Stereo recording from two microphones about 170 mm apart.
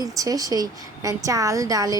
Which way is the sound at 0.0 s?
20° right (ahead or behind).